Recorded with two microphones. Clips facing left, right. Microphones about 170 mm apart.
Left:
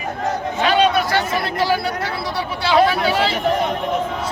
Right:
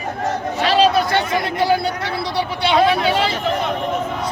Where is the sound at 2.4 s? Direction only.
20° right (ahead or behind).